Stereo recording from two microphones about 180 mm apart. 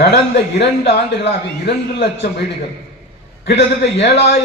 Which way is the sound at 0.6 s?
70° left (ahead or behind).